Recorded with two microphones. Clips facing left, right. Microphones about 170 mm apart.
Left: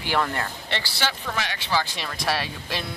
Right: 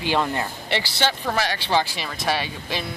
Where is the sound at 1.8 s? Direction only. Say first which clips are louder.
Right 2 dB; 5° right (ahead or behind).